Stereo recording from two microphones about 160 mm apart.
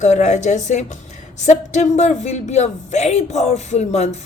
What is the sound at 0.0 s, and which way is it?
A woman's voice, 45° left (ahead or behind).